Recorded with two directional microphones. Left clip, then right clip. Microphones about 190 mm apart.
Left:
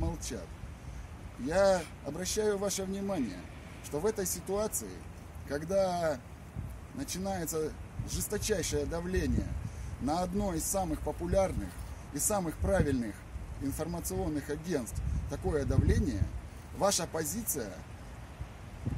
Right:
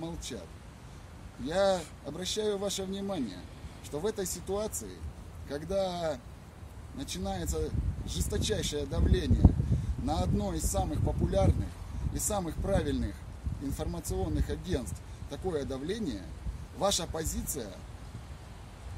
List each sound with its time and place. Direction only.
0.0 s vehicle: centre (ahead or behind)
1.4 s speech: centre (ahead or behind)
17.3 s speech: 20° right (ahead or behind)